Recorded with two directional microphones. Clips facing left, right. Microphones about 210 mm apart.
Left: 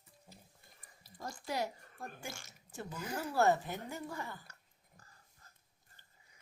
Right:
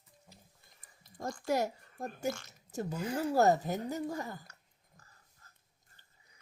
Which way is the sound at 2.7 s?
40° right (ahead or behind).